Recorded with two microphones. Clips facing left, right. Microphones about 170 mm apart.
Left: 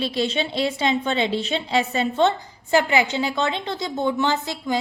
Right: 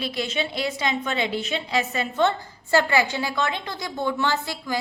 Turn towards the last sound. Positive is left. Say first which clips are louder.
# left 3 dB
turn(degrees=20)  # may be behind; listen again after turning